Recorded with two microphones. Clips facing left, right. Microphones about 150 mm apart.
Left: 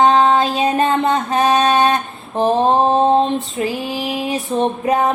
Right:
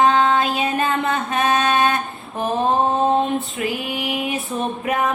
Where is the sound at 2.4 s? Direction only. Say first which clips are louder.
Left 5 dB; 30° left (ahead or behind).